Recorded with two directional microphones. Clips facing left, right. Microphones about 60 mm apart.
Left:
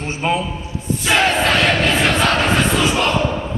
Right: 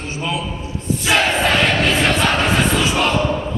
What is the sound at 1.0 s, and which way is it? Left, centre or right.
Crowd, centre.